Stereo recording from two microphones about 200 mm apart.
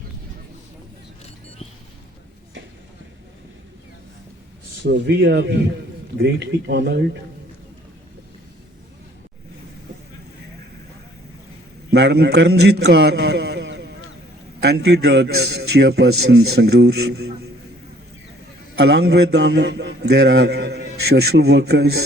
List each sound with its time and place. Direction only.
4.9 s a man's voice: 60° right (ahead or behind)
11.9 s a man's voice: 55° right (ahead or behind)
18.8 s a man's voice: 55° right (ahead or behind)